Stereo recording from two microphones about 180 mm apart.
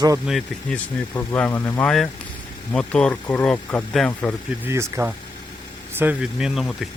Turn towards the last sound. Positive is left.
turn(degrees=0)  # may be behind; listen again after turning